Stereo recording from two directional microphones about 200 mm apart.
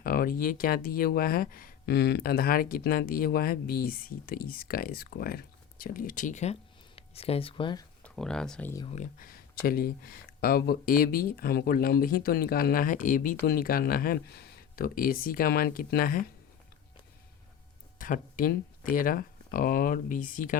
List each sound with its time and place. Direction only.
0.0 s speech: 45° left (ahead or behind); by 7.9 s 25° left (ahead or behind)
8.0 s speech: 5° left (ahead or behind)
8.9 s speech: 40° left (ahead or behind)
17.9 s a sound: 40° left (ahead or behind)
18.9 s speech: 45° left (ahead or behind)